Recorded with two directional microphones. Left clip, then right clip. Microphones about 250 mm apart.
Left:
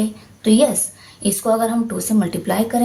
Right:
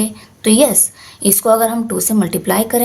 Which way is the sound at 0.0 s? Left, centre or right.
Right.